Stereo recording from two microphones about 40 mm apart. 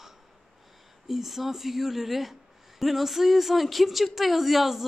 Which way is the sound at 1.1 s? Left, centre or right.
Centre.